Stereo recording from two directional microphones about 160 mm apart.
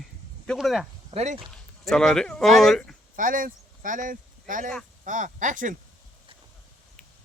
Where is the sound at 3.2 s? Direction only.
60° right (ahead or behind).